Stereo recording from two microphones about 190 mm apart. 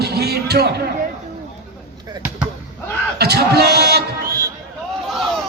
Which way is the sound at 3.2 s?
60° right (ahead or behind).